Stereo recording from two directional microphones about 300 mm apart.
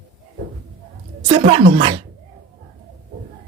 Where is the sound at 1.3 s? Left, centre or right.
Centre.